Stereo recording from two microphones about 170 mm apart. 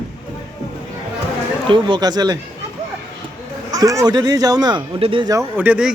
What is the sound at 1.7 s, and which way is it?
Speech, 30° right (ahead or behind).